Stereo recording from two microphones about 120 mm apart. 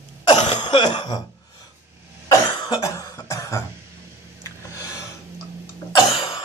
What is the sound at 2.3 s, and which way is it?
Cough, 30° left (ahead or behind).